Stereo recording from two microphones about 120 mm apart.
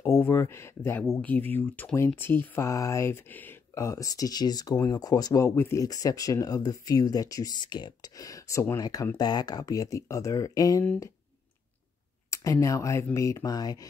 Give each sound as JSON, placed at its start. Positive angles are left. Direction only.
{"t": 0.0, "sound": "speech", "side_deg": 20}
{"t": 12.3, "sound": "speech", "side_deg": 25}